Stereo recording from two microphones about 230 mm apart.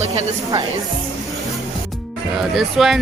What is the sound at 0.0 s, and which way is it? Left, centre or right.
Speech, right.